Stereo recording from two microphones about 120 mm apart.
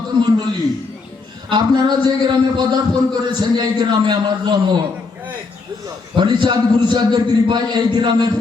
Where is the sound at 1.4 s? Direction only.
35° right (ahead or behind).